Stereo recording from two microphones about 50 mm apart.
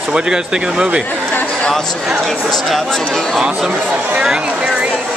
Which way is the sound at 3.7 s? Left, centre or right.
Right.